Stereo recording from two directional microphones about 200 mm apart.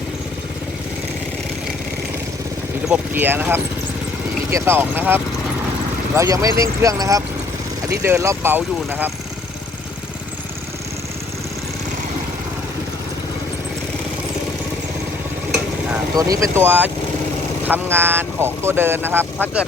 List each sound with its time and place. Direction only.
2.9 s speech: 10° right (ahead or behind)
16.1 s speech: 15° right (ahead or behind)